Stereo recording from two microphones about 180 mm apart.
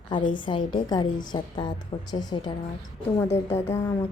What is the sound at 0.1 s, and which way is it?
A woman's voice, 25° left (ahead or behind).